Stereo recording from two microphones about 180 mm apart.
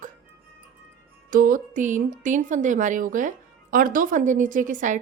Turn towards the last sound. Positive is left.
turn(degrees=-45)  # may be behind; listen again after turning